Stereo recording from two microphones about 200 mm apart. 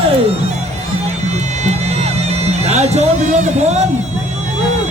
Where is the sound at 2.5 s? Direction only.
35° right (ahead or behind).